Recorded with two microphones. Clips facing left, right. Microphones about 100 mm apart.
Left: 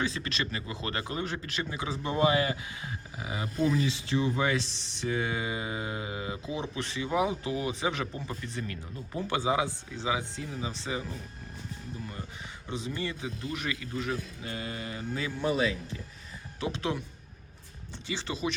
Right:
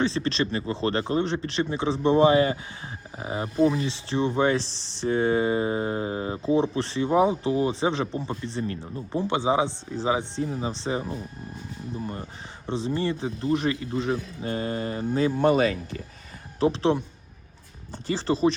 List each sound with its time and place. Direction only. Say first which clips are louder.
0.0 s speech: right 8 dB; 30° right (ahead or behind)
15.4 s speech: right 5 dB; 60° right (ahead or behind)
16.6 s speech: right 10 dB; 35° right (ahead or behind)